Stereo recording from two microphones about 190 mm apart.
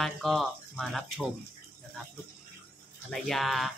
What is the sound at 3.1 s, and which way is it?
Speech, centre (ahead or behind).